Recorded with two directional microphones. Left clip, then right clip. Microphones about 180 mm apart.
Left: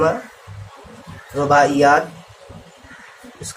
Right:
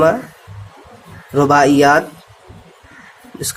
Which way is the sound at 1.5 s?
60° right (ahead or behind).